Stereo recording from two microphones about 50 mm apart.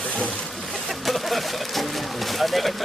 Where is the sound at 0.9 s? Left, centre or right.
Centre.